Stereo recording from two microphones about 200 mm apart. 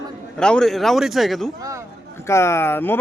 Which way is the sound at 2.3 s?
15° left (ahead or behind).